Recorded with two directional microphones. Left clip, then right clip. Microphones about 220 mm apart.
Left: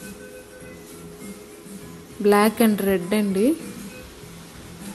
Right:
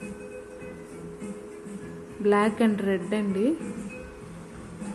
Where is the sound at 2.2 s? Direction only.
35° left (ahead or behind).